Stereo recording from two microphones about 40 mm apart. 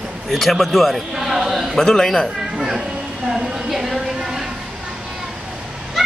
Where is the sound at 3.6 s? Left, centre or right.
Centre.